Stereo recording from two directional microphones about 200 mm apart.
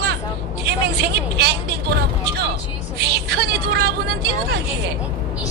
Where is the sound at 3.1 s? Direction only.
55° right (ahead or behind).